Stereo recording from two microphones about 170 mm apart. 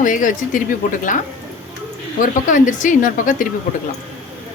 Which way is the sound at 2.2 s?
50° left (ahead or behind).